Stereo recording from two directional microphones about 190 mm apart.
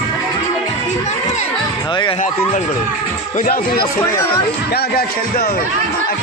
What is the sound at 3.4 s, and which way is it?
Speech, 50° left (ahead or behind).